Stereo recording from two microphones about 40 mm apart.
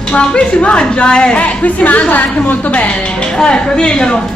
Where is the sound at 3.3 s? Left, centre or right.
Left.